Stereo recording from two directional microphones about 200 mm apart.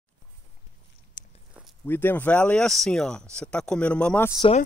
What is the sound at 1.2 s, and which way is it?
Biting, 45° left (ahead or behind).